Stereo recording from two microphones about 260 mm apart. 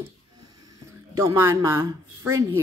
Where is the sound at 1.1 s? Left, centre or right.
Centre.